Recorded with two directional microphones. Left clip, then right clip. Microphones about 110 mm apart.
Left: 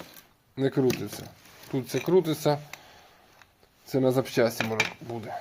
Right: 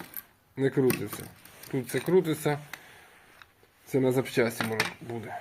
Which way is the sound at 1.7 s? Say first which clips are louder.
Left 1 dB; 35° left (ahead or behind).